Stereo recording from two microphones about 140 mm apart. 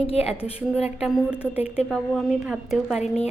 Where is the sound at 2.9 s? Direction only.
50° left (ahead or behind).